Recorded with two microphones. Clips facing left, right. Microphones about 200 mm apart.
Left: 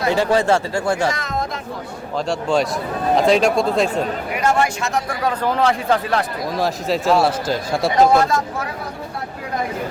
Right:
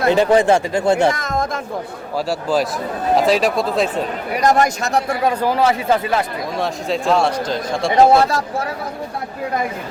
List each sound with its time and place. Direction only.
0.1 s speech: 20° right (ahead or behind)
1.1 s speech: 45° right (ahead or behind)
2.1 s speech: 5° right (ahead or behind)
4.4 s speech: 40° right (ahead or behind)
5.0 s speech: 15° right (ahead or behind); by 7.9 s 5° left (ahead or behind)
7.9 s speech: 30° right (ahead or behind)